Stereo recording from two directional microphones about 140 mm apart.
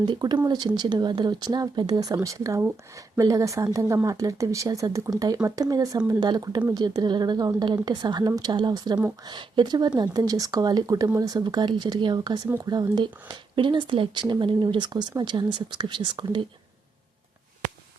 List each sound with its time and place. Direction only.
0.0 s speech: 30° right (ahead or behind)